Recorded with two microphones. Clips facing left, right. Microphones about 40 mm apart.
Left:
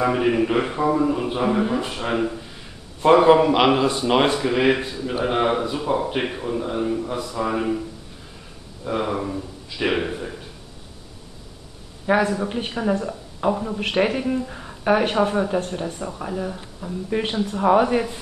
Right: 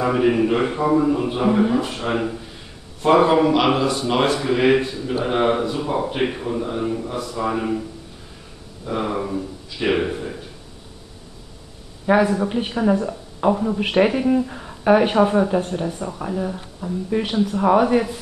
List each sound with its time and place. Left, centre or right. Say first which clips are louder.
0.0 s speech: right 2 dB; centre
3.2 s speech: left 1 dB; centre
3.5 s speech: even; centre
4.4 s speech: right 2 dB; centre
8.8 s speech: even; centre
12.1 s speech: right 3 dB; centre